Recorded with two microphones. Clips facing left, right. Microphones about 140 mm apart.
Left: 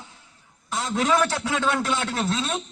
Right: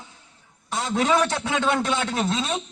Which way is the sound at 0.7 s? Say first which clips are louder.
Right 1 dB; 30° right (ahead or behind).